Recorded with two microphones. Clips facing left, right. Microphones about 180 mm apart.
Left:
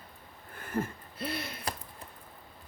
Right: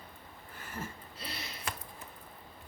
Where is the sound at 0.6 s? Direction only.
55° left (ahead or behind).